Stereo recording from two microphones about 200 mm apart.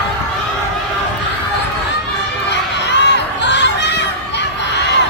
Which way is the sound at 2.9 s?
60° left (ahead or behind).